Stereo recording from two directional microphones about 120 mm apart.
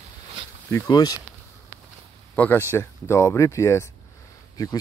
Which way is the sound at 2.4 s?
20° left (ahead or behind).